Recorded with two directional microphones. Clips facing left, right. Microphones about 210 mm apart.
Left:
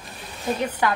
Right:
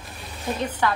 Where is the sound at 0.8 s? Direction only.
10° left (ahead or behind).